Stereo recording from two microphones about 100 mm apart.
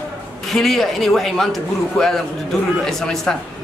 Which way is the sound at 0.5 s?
Centre (ahead or behind).